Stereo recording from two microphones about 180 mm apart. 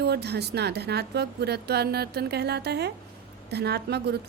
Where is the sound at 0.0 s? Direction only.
65° right (ahead or behind).